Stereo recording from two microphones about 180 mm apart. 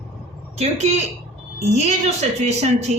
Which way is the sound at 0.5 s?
40° right (ahead or behind).